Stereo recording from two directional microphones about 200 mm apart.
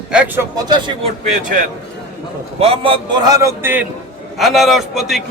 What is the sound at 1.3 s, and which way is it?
Speech, 40° right (ahead or behind).